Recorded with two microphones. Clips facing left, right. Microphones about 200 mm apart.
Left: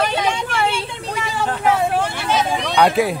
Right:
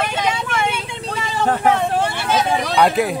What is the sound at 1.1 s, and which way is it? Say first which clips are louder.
Vehicle: right 4 dB; 10° left (ahead or behind).